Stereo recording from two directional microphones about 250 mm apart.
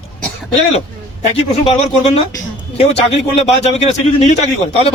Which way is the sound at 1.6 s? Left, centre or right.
Left.